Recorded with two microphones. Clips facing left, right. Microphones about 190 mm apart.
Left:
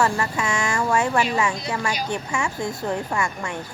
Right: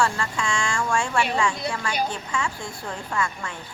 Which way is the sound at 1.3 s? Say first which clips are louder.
Left 1 dB; 5° left (ahead or behind).